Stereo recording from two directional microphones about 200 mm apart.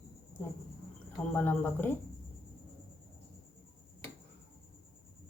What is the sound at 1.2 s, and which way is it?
Speech, 10° left (ahead or behind).